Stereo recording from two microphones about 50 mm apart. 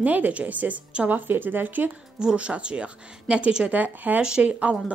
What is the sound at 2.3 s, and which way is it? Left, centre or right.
A woman's voice, right.